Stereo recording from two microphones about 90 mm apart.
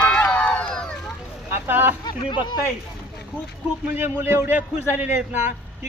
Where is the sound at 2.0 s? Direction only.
55° left (ahead or behind).